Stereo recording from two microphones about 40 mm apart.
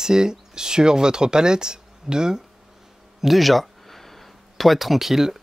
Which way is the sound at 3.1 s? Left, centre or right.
Centre.